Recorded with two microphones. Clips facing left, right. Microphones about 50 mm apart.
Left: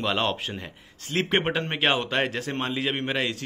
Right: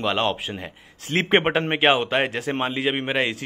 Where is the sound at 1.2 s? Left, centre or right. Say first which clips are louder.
Right 5 dB; right.